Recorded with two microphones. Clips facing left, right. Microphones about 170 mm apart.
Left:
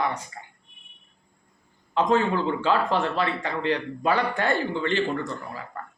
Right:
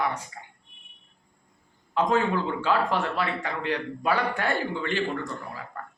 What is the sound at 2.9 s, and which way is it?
Speech, 5° right (ahead or behind).